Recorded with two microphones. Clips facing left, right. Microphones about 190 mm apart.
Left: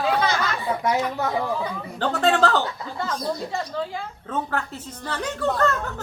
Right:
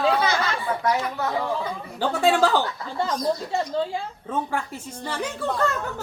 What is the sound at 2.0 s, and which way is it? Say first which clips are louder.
Speech: even; 10° right (ahead or behind).